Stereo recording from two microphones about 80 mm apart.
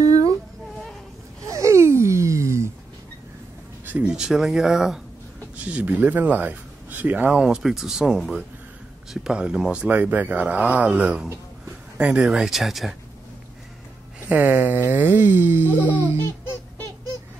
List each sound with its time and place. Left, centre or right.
1.5 s gasp: right
3.8 s speech: centre
5.6 s speech: centre
12.3 s speech: centre
14.3 s speech: right